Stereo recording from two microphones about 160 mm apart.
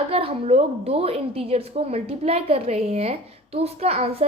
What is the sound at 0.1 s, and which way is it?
A woman's voice, 35° right (ahead or behind).